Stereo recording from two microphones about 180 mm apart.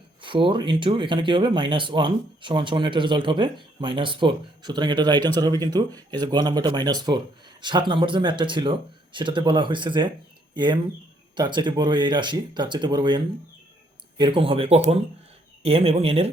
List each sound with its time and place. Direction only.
0.2 s speech: 30° right (ahead or behind)